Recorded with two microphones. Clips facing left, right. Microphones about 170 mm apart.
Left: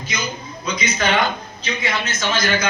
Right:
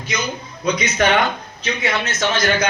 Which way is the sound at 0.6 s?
65° right (ahead or behind).